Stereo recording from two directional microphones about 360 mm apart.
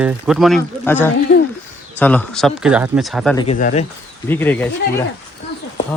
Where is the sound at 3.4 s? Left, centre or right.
Centre.